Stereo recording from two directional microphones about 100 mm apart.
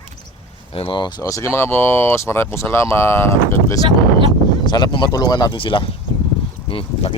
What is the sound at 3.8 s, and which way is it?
Speech, 60° right (ahead or behind).